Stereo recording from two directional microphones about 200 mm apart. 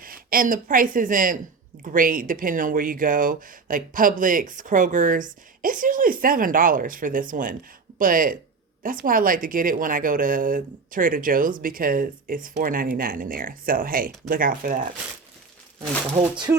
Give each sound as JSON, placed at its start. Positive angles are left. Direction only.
{"t": 0.0, "sound": "speech", "side_deg": -45}
{"t": 16.5, "sound": "music", "side_deg": -15}